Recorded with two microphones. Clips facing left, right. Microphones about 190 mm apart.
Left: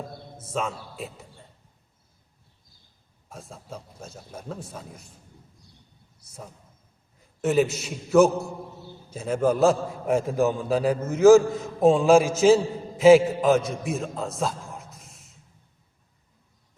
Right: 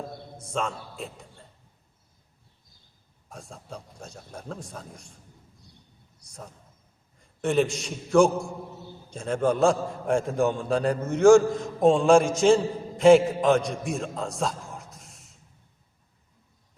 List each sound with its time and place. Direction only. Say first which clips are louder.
0.3 s a man's voice: left 1 dB; 5° left (ahead or behind)
3.2 s a man's voice: left 1 dB; centre (ahead or behind)
6.1 s a man's voice: left 1 dB; 5° left (ahead or behind)